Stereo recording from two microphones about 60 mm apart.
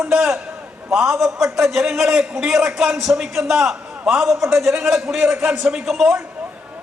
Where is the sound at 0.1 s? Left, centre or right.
Centre.